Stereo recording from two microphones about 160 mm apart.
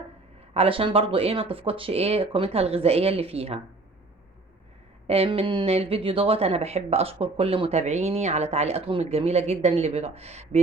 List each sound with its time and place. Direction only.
0.5 s speech: 35° right (ahead or behind)
5.0 s speech: 35° right (ahead or behind)